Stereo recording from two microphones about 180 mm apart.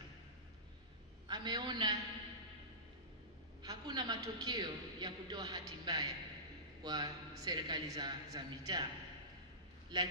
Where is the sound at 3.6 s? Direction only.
20° right (ahead or behind).